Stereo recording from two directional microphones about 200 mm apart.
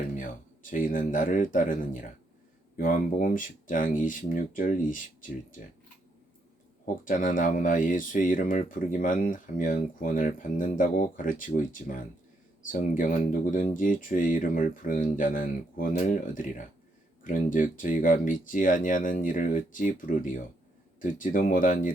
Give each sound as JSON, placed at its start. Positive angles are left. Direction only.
{"t": 0.2, "sound": "speech", "side_deg": 40}
{"t": 6.8, "sound": "speech", "side_deg": 40}